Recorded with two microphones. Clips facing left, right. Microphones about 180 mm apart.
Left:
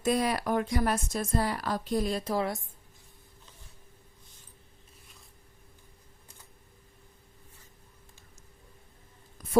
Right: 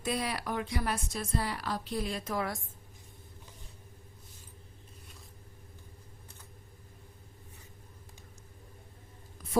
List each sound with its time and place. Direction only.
0.0 s a woman's voice: 45° left (ahead or behind); by 2.6 s 30° left (ahead or behind)